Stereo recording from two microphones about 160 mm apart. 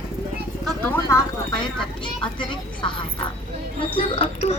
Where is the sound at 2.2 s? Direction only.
30° left (ahead or behind).